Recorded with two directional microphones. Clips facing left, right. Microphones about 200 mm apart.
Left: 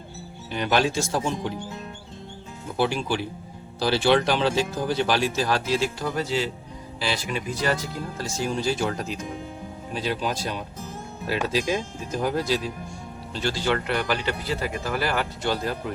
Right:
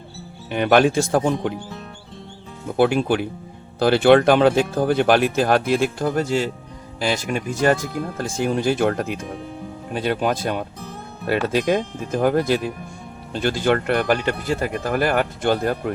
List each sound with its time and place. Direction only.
0.5 s speech: 55° right (ahead or behind)
2.7 s speech: 55° right (ahead or behind)